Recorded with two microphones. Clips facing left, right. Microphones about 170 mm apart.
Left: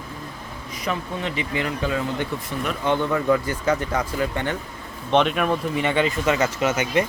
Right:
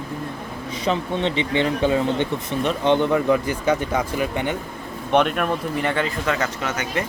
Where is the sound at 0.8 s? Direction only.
25° right (ahead or behind).